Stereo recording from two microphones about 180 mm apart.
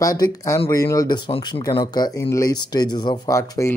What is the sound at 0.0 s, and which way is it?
Speech, 20° left (ahead or behind).